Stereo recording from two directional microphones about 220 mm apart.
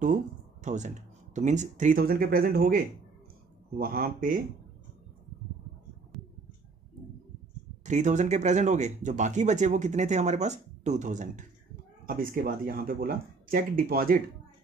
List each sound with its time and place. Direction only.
0.0 s speech: 35° right (ahead or behind)
7.8 s speech: 35° right (ahead or behind)